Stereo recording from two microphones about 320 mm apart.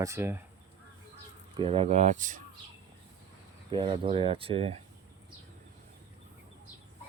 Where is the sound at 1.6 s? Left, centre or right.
Centre.